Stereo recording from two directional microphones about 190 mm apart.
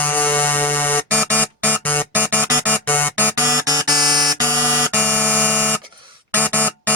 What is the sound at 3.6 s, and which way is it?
Music, 20° right (ahead or behind).